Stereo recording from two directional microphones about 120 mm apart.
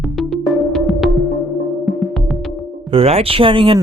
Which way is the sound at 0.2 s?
Centre (ahead or behind).